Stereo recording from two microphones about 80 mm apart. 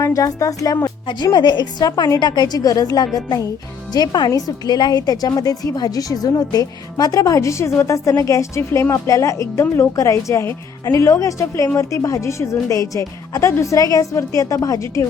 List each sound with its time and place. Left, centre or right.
0.0 s a woman's voice: left
1.0 s a woman's voice: left